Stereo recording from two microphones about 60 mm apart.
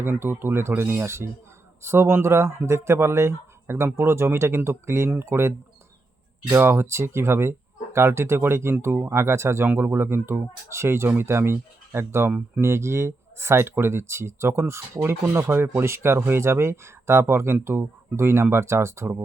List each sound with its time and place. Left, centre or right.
0.0 s speech: right
6.6 s speech: right
15.8 s speech: right